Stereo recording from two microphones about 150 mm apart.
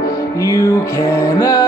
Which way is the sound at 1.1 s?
20° left (ahead or behind).